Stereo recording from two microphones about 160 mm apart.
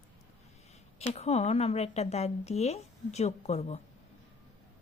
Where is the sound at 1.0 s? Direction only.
40° left (ahead or behind).